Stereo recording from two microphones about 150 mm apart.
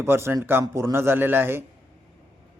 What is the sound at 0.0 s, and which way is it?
Speech, 15° right (ahead or behind).